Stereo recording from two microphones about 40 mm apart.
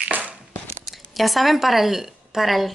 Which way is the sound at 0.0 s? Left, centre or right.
Right.